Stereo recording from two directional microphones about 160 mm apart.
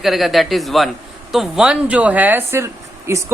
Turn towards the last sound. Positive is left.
turn(degrees=-15)  # may be behind; listen again after turning